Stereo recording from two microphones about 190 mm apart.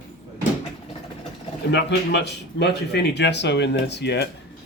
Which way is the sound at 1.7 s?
65° left (ahead or behind).